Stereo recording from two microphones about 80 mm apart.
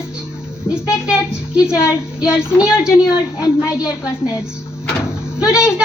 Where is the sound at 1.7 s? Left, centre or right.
Left.